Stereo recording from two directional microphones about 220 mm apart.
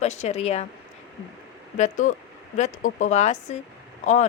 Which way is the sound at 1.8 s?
35° left (ahead or behind).